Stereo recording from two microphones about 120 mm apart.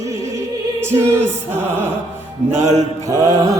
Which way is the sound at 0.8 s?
20° right (ahead or behind).